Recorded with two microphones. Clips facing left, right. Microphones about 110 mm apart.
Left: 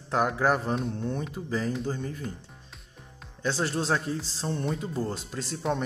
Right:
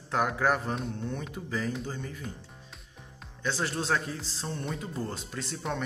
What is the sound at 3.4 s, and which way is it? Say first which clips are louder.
Speech: left 3 dB; 35° left (ahead or behind).